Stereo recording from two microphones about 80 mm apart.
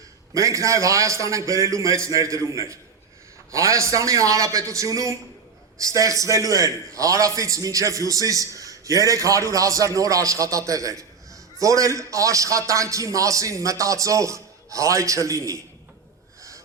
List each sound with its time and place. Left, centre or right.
0.3 s a man's voice: right